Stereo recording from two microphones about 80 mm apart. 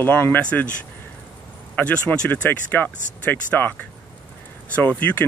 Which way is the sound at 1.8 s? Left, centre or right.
Centre.